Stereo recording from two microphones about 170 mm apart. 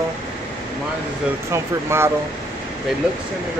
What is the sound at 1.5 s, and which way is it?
Speech, 15° right (ahead or behind).